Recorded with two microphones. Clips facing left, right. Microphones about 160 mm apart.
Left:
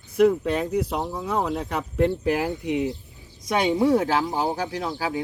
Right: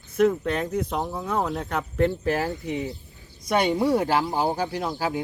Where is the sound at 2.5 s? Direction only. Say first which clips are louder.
Left 4 dB; centre (ahead or behind).